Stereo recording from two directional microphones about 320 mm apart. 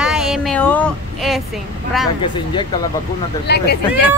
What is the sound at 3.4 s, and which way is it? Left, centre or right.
Speech, left.